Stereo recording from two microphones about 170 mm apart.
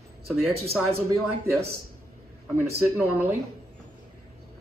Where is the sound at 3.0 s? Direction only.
10° right (ahead or behind).